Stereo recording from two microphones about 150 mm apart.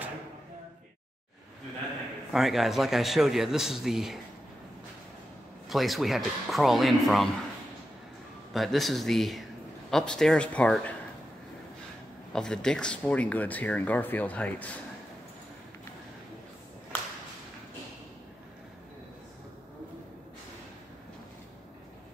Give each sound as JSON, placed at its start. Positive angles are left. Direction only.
{"t": 2.3, "sound": "a man's voice", "side_deg": 0}
{"t": 5.7, "sound": "a man's voice", "side_deg": 0}
{"t": 8.5, "sound": "speech", "side_deg": 0}
{"t": 12.3, "sound": "speech", "side_deg": 5}